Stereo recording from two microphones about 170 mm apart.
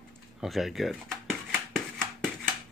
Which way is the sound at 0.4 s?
Centre (ahead or behind).